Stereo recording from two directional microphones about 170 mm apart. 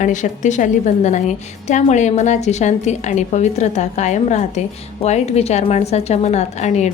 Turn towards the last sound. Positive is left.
turn(degrees=40)  # may be behind; listen again after turning